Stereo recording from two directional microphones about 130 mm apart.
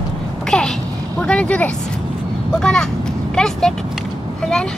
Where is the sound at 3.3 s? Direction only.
5° left (ahead or behind).